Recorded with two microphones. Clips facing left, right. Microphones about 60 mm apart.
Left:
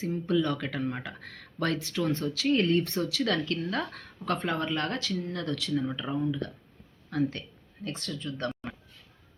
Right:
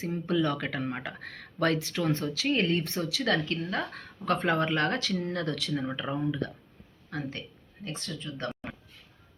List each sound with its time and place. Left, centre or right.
0.0 s speech: right
4.3 s speech: right
7.1 s speech: right